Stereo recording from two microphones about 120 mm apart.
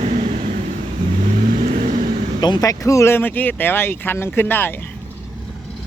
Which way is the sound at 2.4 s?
35° left (ahead or behind).